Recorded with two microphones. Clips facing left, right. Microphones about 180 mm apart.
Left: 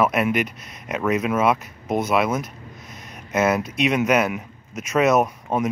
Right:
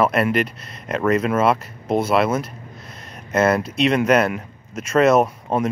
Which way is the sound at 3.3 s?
10° left (ahead or behind).